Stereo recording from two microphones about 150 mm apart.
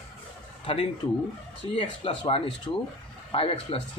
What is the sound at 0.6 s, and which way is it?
Speech, 40° left (ahead or behind).